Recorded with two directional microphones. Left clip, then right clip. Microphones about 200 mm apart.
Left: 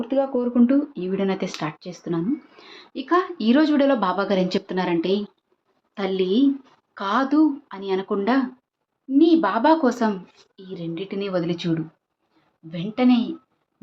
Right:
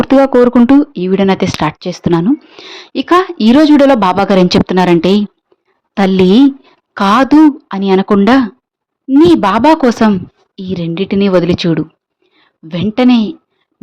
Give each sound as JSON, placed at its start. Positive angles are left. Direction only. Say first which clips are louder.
{"t": 0.7, "sound": "a woman's voice", "louder": "right 13 dB", "side_deg": -50}